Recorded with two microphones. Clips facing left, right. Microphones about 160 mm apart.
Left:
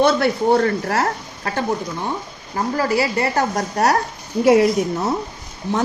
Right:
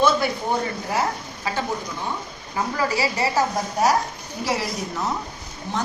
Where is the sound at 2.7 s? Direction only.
50° left (ahead or behind).